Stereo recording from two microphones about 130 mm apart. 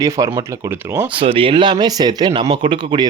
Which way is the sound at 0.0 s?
25° right (ahead or behind).